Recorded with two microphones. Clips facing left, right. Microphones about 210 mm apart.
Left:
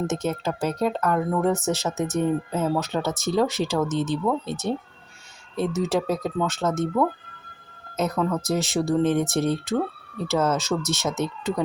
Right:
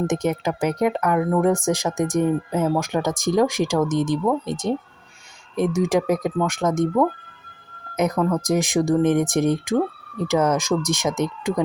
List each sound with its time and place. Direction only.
0.1 s speech: 15° right (ahead or behind)